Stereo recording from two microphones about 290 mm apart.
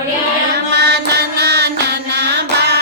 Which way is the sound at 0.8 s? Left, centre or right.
Right.